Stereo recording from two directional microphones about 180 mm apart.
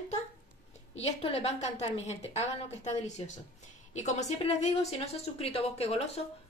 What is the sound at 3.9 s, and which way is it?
A woman's voice, 40° left (ahead or behind).